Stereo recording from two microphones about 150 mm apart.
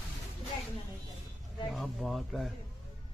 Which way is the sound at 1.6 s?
Centre (ahead or behind).